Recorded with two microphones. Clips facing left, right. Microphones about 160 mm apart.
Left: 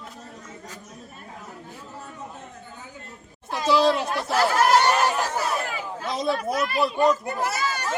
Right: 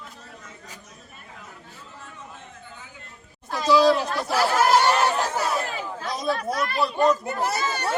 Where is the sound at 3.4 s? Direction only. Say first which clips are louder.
Right 2 dB; 25° left (ahead or behind).